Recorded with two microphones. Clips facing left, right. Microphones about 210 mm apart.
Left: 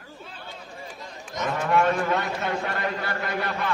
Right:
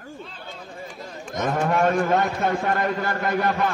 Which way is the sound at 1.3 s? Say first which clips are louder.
Right 2 dB; 50° right (ahead or behind).